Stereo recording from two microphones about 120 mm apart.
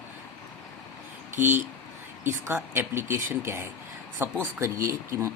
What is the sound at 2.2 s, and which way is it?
Speech, 20° right (ahead or behind).